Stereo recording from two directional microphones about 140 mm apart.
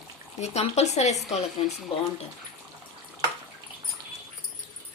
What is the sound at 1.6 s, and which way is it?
Speech, 40° left (ahead or behind).